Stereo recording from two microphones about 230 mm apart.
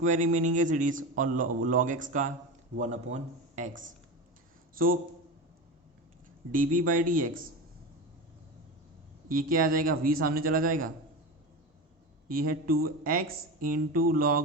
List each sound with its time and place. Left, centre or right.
0.0 s a man's voice: right
3.7 s speech: right
6.5 s a man's voice: right
9.3 s a man's voice: right
12.3 s a man's voice: right